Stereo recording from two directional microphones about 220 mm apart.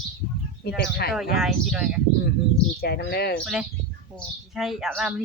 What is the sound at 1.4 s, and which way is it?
Speech, centre (ahead or behind).